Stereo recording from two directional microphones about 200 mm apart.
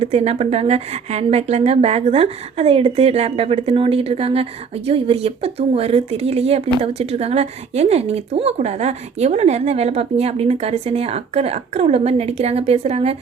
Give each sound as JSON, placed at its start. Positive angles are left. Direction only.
{"t": 0.0, "sound": "speech", "side_deg": -35}